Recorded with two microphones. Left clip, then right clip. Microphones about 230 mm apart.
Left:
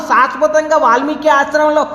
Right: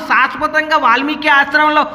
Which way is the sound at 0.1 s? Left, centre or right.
Right.